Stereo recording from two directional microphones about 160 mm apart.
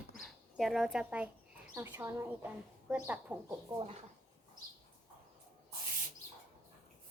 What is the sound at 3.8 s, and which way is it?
Speech, 40° right (ahead or behind).